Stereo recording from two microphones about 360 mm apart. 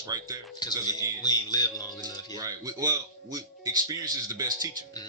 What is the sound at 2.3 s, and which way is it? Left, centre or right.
Speech, centre.